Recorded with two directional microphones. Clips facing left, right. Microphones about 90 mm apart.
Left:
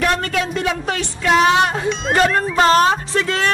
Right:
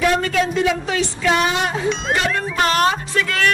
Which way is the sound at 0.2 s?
50° left (ahead or behind).